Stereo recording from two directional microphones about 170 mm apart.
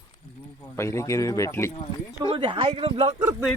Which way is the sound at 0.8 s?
15° left (ahead or behind).